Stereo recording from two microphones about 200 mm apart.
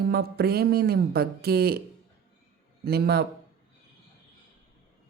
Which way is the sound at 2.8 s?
55° right (ahead or behind).